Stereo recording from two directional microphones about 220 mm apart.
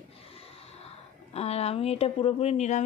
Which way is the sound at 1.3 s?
30° left (ahead or behind).